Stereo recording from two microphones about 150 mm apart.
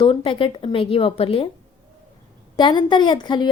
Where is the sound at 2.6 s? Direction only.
30° left (ahead or behind).